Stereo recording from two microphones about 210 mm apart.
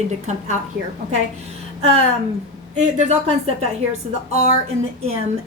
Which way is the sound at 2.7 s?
30° right (ahead or behind).